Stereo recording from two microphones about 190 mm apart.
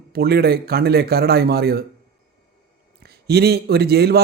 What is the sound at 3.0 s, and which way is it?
Speech, 55° right (ahead or behind).